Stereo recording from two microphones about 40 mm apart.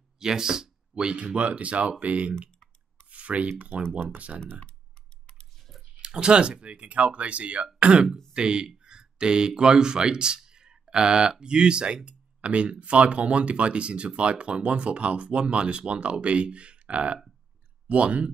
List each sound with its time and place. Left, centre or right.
0.2 s a sound: centre
1.0 s speech: right
3.1 s rub: right
4.3 s speech: centre
5.6 s a sound: centre
5.9 s speech: right